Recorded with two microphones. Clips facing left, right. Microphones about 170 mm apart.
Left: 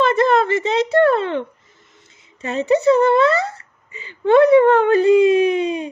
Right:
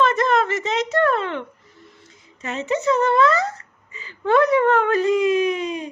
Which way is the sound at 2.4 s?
35° left (ahead or behind).